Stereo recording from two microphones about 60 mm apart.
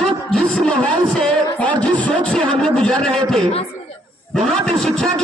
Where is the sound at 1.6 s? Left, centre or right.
Left; by 5.2 s centre.